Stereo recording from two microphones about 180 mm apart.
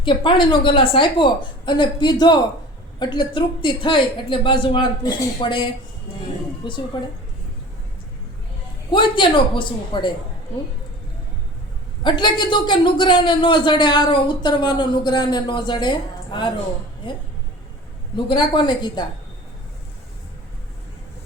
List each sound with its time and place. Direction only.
0.0 s a man's voice: 25° left (ahead or behind)
8.9 s a man's voice: 25° left (ahead or behind)
12.0 s a man's voice: 25° left (ahead or behind)
18.3 s a man's voice: 25° left (ahead or behind)